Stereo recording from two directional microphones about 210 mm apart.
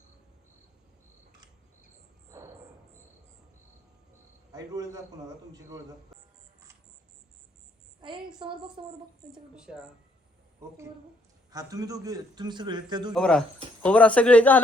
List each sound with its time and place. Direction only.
4.5 s a man's voice: 15° right (ahead or behind)
8.0 s a sound: 25° right (ahead or behind)
8.8 s a man's voice: 25° right (ahead or behind)
9.3 s speech: 5° right (ahead or behind)
11.5 s a man's voice: 15° right (ahead or behind)
13.1 s a man's voice: 5° left (ahead or behind)